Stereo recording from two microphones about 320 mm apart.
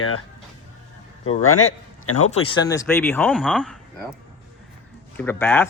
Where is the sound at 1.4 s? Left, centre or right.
Left.